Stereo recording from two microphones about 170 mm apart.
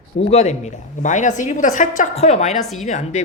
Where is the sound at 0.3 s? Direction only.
40° left (ahead or behind).